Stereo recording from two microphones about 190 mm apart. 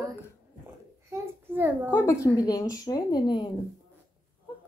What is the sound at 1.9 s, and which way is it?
Speech, 15° left (ahead or behind).